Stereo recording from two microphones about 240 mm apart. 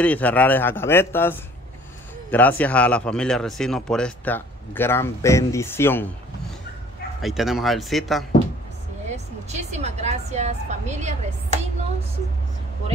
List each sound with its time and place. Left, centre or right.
0.0 s a man's voice: centre
7.2 s speech: centre
9.1 s a woman's voice: right